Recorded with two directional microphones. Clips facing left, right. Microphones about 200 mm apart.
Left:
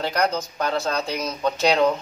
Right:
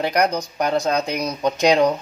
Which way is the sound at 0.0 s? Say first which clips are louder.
Right 3 dB; 15° right (ahead or behind).